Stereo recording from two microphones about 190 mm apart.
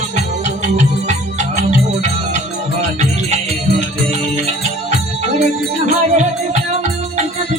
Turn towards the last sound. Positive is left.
turn(degrees=-40)  # may be behind; listen again after turning